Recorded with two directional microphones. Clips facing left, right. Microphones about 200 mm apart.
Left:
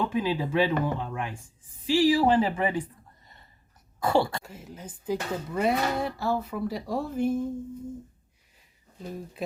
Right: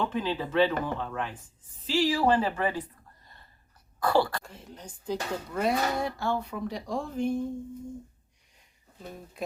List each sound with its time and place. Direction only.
0.0 s speech: 10° left (ahead or behind)
4.0 s speech: 25° left (ahead or behind)
4.4 s speech: 5° left (ahead or behind)
9.0 s speech: centre (ahead or behind)